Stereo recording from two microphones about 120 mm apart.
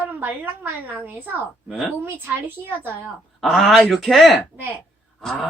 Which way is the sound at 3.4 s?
Centre (ahead or behind).